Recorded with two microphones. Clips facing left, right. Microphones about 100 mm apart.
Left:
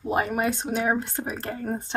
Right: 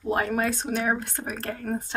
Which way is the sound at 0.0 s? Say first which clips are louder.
Left 1 dB; 15° left (ahead or behind).